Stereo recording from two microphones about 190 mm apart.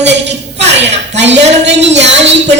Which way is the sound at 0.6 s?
65° right (ahead or behind).